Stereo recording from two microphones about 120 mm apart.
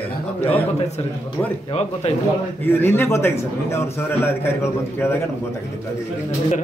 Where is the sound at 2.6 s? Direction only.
20° left (ahead or behind).